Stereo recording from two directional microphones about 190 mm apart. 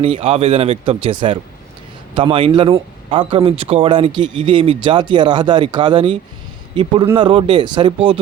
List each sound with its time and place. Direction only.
0.0 s speech: 30° right (ahead or behind)